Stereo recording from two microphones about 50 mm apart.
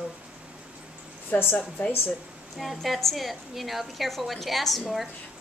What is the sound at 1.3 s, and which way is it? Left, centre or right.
Speech, left.